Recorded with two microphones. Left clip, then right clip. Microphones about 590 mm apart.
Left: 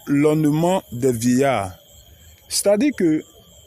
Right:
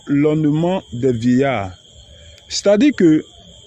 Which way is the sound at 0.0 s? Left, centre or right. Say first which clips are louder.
Right 1 dB; left.